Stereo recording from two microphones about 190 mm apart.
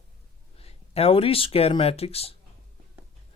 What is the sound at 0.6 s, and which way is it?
Speech, 30° left (ahead or behind).